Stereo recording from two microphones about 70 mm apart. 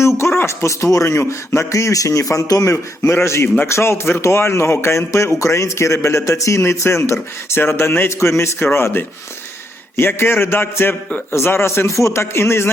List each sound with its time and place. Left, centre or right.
0.2 s speech: left
3.0 s speech: left